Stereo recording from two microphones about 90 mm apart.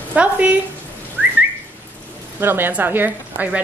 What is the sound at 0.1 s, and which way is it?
Speech, 15° right (ahead or behind).